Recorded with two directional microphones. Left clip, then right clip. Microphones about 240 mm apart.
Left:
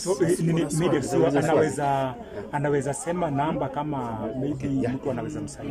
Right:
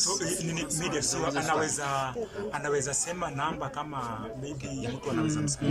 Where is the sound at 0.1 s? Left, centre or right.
Left.